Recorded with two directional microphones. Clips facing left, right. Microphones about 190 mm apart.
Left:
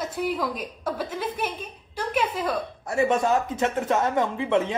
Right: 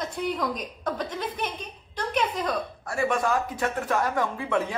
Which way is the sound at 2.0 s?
5° left (ahead or behind).